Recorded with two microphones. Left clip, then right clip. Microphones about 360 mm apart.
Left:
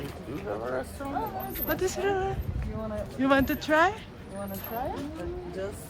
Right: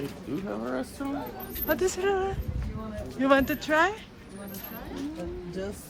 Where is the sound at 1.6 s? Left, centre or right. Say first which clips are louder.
Right 2 dB; centre.